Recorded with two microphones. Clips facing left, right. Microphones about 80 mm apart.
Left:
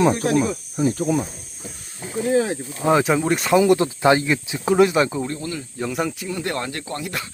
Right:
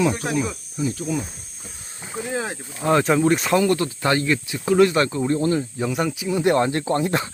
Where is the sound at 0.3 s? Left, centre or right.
Left.